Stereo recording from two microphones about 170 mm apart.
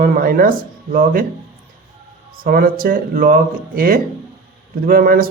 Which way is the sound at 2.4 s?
60° right (ahead or behind).